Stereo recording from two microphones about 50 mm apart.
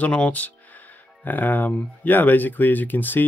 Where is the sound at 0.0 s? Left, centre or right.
Left.